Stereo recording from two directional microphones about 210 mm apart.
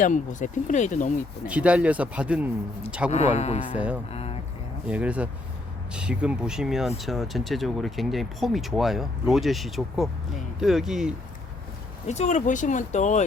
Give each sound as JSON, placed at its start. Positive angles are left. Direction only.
{"t": 0.0, "sound": "speech", "side_deg": 35}
{"t": 1.5, "sound": "speech", "side_deg": -5}
{"t": 3.1, "sound": "speech", "side_deg": 30}
{"t": 3.8, "sound": "speech", "side_deg": -5}
{"t": 4.1, "sound": "a sound", "side_deg": 30}
{"t": 4.9, "sound": "speech", "side_deg": -5}
{"t": 12.0, "sound": "speech", "side_deg": 35}